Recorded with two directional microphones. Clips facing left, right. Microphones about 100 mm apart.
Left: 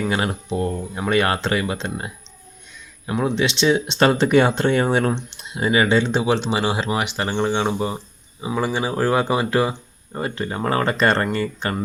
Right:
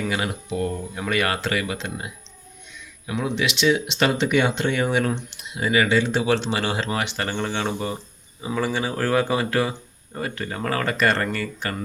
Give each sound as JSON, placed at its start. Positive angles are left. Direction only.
{"t": 0.0, "sound": "speech", "side_deg": 30}